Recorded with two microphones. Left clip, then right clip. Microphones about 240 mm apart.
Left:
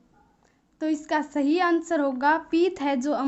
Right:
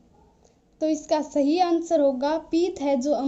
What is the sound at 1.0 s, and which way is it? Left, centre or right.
A woman's voice, centre.